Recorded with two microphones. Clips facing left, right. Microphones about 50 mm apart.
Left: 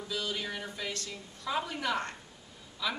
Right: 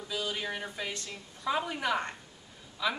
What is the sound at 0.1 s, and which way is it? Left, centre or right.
Speech, centre.